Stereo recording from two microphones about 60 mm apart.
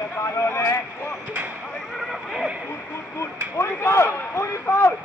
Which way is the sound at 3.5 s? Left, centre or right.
Left.